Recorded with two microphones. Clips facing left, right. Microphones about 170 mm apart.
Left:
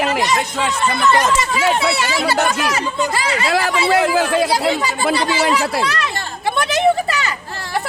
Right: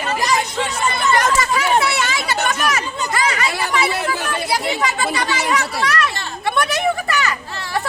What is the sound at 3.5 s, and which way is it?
Speech, 90° left.